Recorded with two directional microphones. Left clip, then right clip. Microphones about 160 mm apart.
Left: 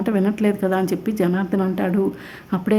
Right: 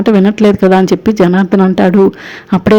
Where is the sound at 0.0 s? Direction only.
35° right (ahead or behind).